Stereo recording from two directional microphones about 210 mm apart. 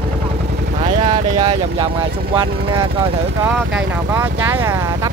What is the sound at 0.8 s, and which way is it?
Vehicle, 25° right (ahead or behind).